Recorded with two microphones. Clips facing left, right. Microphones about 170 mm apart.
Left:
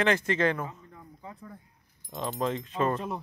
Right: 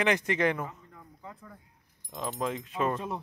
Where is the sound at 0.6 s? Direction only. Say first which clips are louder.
Left 1 dB; 10° left (ahead or behind).